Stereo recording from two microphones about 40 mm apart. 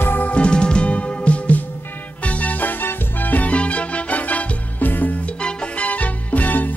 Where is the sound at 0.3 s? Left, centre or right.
Left.